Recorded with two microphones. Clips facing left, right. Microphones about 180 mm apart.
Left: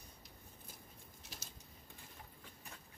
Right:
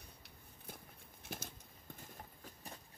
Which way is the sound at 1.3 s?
55° right (ahead or behind).